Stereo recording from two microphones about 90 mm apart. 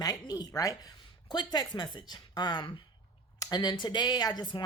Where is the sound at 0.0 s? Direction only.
45° left (ahead or behind).